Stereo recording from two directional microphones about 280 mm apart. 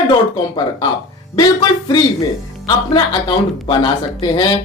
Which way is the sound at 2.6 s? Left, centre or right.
Centre.